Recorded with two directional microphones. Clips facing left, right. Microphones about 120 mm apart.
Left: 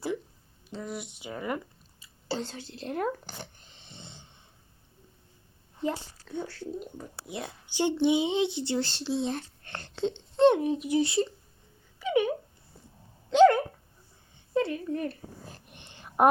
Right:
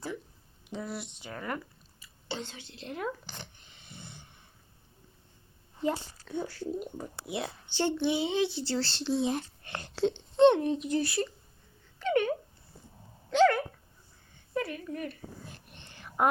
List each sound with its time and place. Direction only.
0.7 s speech: 5° right (ahead or behind)
1.2 s speech: 15° left (ahead or behind)
2.2 s speech: 40° left (ahead or behind)
3.8 s snoring: 25° left (ahead or behind)
5.8 s speech: 5° right (ahead or behind)
7.7 s speech: 15° left (ahead or behind)
9.0 s speech: 5° right (ahead or behind)
10.3 s speech: 5° left (ahead or behind)
11.0 s speech: 25° left (ahead or behind)
11.9 s a sound: 10° left (ahead or behind)
13.3 s dog: 20° left (ahead or behind); by 15.6 s 35° left (ahead or behind)
15.7 s a sound: 20° left (ahead or behind)